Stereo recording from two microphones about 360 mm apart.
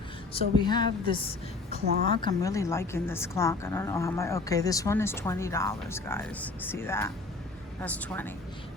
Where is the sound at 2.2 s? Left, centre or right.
Centre.